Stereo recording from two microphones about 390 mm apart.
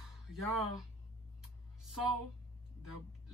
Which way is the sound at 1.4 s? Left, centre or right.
Centre.